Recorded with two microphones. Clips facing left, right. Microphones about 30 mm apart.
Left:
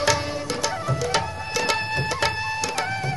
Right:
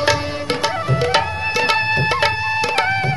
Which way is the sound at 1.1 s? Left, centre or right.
Right.